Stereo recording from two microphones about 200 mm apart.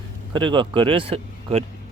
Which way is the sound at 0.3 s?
25° right (ahead or behind).